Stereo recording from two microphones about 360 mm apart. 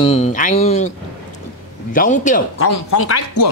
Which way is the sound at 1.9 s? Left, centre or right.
Left.